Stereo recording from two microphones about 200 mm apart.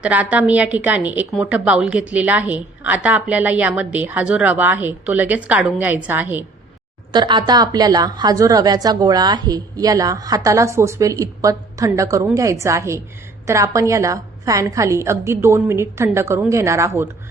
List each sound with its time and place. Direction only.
0.0 s a woman's voice: 5° right (ahead or behind)
7.1 s a woman's voice: 20° right (ahead or behind)